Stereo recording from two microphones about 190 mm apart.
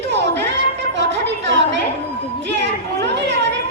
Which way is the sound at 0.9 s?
70° right (ahead or behind).